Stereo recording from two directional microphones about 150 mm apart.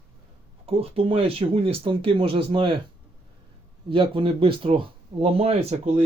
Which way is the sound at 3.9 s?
35° right (ahead or behind).